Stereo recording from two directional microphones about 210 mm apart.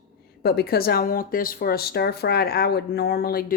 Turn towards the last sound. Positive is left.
turn(degrees=45)  # may be behind; listen again after turning